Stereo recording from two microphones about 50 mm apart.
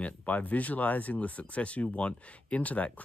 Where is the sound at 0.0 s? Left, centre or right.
Left.